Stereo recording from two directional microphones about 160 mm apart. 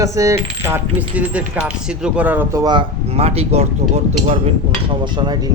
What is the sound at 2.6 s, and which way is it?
Speech, 30° right (ahead or behind).